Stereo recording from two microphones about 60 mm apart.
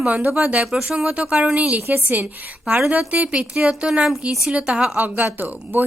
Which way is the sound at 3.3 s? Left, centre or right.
Centre.